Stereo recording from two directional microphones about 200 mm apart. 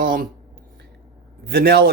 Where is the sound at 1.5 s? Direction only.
50° right (ahead or behind).